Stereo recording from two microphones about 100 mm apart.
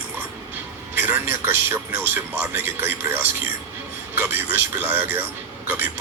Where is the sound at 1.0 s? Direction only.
20° right (ahead or behind).